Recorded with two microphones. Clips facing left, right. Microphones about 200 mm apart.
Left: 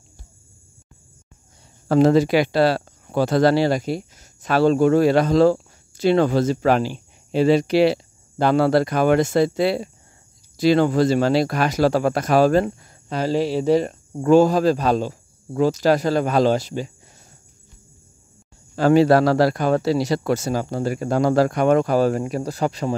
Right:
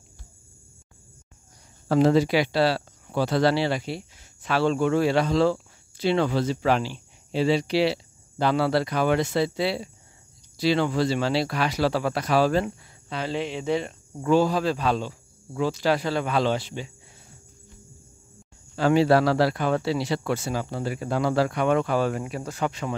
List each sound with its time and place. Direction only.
1.9 s speech: 45° left (ahead or behind)
18.8 s speech: 45° left (ahead or behind)